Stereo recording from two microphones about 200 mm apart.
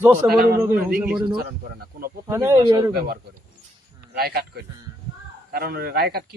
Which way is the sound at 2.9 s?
50° right (ahead or behind).